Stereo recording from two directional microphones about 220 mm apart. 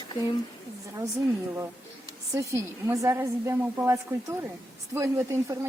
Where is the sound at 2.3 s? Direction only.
15° right (ahead or behind).